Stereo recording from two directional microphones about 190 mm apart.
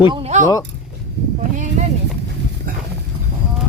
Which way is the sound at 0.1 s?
35° right (ahead or behind).